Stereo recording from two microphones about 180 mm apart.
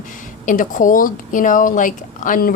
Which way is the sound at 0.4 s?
45° left (ahead or behind).